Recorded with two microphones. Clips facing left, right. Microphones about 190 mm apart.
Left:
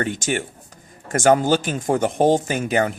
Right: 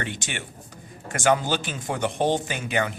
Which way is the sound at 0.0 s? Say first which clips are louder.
Left 9 dB; 45° left (ahead or behind).